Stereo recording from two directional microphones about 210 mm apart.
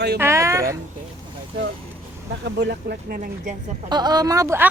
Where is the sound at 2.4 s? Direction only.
55° right (ahead or behind).